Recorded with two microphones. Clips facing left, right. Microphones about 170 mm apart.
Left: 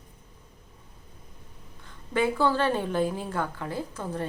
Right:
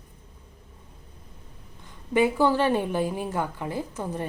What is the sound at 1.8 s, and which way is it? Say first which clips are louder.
A woman's voice: right 4 dB; 15° right (ahead or behind).